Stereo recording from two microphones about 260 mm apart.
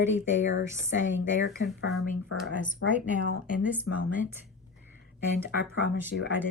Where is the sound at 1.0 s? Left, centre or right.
Left.